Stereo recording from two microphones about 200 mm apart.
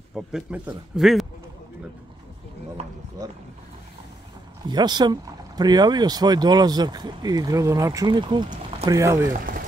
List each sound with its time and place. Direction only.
0.1 s a man's voice: 5° right (ahead or behind)
4.6 s speech: 20° right (ahead or behind)